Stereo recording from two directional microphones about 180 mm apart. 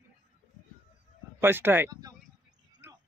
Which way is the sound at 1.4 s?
10° right (ahead or behind).